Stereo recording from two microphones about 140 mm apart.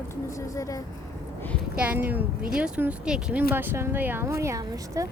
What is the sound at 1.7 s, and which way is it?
A woman's voice, 10° right (ahead or behind).